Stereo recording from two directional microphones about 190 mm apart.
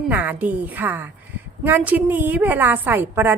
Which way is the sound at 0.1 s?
10° right (ahead or behind).